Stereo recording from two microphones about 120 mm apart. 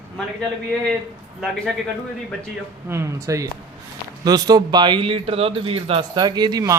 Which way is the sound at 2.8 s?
20° right (ahead or behind).